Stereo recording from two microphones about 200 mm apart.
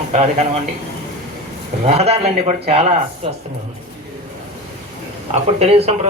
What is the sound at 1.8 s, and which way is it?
Speech, 30° right (ahead or behind).